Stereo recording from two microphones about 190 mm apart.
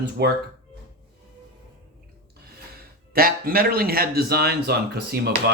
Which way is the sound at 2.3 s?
55° right (ahead or behind).